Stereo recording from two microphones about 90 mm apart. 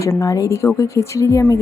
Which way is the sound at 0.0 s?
35° left (ahead or behind).